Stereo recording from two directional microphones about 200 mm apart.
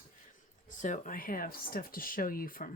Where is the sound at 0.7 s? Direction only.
40° left (ahead or behind).